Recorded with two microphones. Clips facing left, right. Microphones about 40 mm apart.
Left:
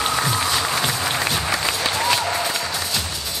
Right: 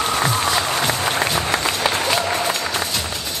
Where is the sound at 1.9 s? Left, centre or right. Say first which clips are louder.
Right 1 dB; centre.